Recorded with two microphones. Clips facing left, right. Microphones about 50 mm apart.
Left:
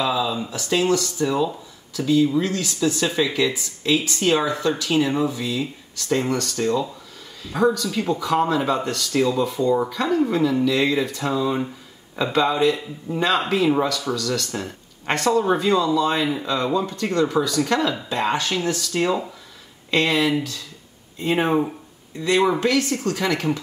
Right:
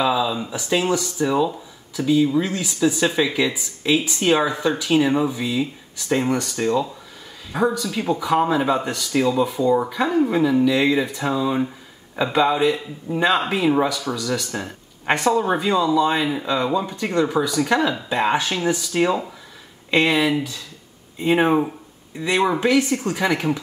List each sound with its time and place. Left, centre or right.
0.0 s speech: centre
3.1 s speech: centre
3.3 s speech: centre